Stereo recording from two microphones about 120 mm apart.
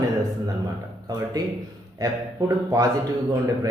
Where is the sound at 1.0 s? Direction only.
30° right (ahead or behind).